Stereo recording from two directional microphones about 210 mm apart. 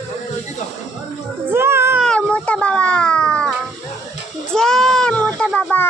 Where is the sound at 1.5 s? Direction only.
10° right (ahead or behind).